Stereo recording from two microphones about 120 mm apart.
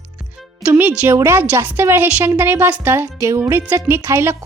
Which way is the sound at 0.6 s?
15° right (ahead or behind).